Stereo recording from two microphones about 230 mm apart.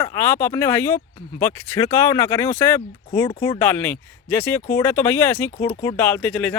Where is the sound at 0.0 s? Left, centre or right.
Centre.